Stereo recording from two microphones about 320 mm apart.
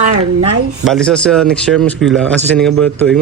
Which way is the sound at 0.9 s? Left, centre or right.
Centre.